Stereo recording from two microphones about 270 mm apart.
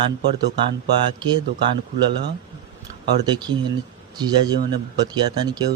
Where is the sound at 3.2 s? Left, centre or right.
Centre.